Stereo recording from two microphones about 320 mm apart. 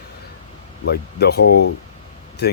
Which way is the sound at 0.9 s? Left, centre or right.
Left.